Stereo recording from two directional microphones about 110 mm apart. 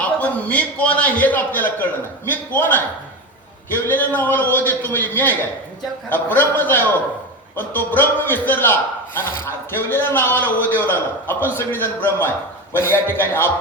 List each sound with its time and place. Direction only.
0.0 s a man's voice: 15° left (ahead or behind)